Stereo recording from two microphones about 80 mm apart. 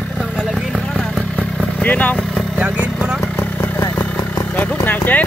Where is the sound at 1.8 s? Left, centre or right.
Centre.